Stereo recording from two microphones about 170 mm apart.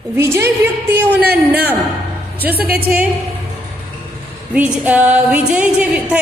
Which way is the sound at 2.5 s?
65° right (ahead or behind).